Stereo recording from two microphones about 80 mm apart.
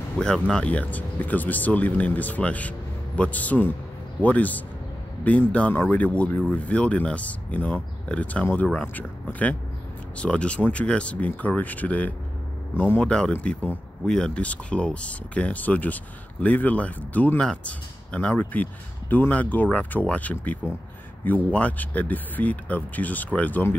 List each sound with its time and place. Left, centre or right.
0.2 s speech: centre; by 13.0 s left
13.0 s speech: centre